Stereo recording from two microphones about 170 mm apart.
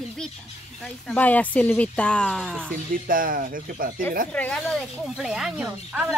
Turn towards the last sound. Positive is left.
turn(degrees=-5)  # may be behind; listen again after turning